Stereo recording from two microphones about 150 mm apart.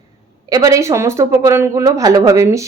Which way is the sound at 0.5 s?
20° right (ahead or behind).